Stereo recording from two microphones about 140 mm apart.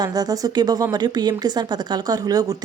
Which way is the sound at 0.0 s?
30° right (ahead or behind).